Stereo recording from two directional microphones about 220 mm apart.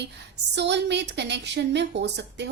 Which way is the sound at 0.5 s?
50° right (ahead or behind).